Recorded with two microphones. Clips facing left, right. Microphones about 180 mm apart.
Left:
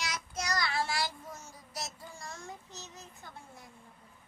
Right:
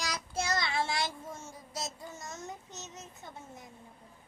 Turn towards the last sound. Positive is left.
turn(degrees=-20)  # may be behind; listen again after turning